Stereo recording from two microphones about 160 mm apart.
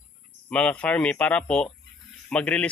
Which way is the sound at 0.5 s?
5° left (ahead or behind).